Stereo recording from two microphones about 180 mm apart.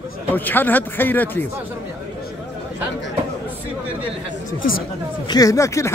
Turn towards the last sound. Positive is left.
turn(degrees=15)  # may be behind; listen again after turning